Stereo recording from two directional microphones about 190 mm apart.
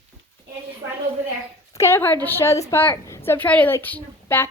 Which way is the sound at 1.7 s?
15° left (ahead or behind).